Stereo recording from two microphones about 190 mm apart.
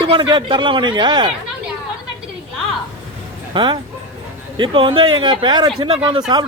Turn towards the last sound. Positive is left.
turn(degrees=-20)  # may be behind; listen again after turning